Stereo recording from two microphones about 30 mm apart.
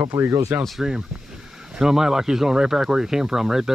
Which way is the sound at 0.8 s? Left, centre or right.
Centre.